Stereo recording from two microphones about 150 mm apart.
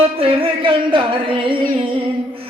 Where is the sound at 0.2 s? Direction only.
35° right (ahead or behind).